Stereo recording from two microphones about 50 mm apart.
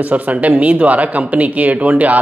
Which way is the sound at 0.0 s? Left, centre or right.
Right.